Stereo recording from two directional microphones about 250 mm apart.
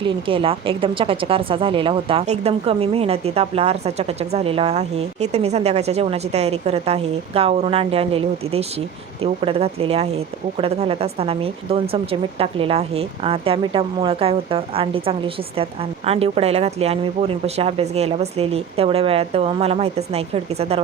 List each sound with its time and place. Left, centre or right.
0.0 s a woman's voice: right